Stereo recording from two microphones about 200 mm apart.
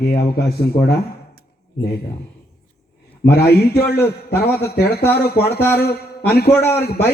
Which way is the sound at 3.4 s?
55° left (ahead or behind).